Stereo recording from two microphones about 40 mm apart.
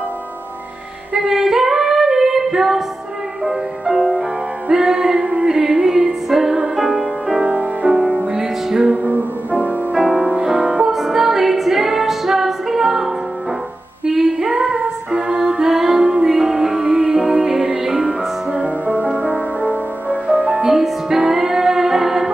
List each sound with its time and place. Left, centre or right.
1.1 s female singing: centre
3.4 s music: centre
7.3 s music: right
8.4 s music: centre
8.9 s music: right
9.9 s music: centre
14.0 s female singing: centre
15.0 s music: centre
18.0 s music: right
18.9 s music: right
20.7 s music: centre